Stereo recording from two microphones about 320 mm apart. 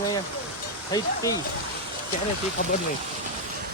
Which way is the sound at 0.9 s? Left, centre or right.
Centre.